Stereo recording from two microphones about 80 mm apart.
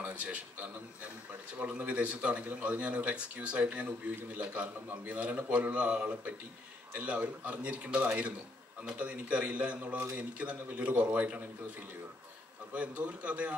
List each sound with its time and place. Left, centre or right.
0.0 s a man's voice: centre
12.7 s speech: centre